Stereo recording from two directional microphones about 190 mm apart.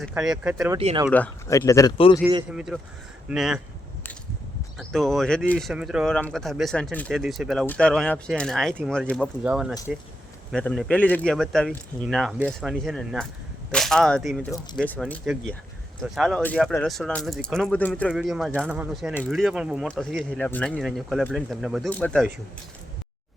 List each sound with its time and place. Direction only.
0.1 s speech: 5° right (ahead or behind)
0.8 s speech: 30° right (ahead or behind)
1.1 s speech: 10° left (ahead or behind)
2.5 s speech: 5° right (ahead or behind)
4.8 s speech: centre (ahead or behind)